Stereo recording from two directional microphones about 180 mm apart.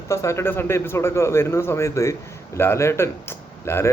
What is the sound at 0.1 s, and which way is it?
Speech, 15° left (ahead or behind).